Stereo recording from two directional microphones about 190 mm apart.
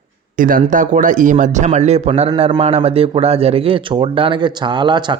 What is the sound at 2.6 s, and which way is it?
Speech, 30° right (ahead or behind).